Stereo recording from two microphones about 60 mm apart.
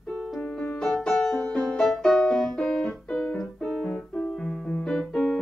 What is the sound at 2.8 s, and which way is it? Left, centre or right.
Keyboard, centre.